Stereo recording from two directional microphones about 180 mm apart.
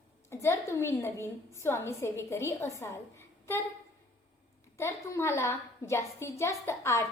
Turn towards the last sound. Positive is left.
turn(degrees=15)  # may be behind; listen again after turning